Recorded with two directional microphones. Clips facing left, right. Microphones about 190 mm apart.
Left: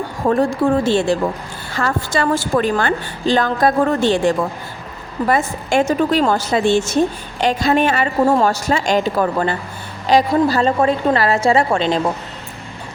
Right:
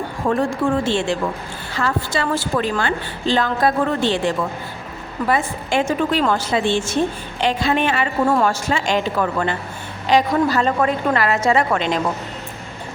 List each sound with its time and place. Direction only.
0.3 s a woman's voice: 40° left (ahead or behind)